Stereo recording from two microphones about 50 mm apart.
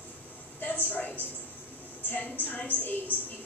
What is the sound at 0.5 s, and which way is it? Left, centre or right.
A woman's voice, left.